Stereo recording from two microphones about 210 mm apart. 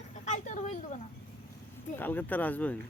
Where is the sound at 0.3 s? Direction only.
35° left (ahead or behind).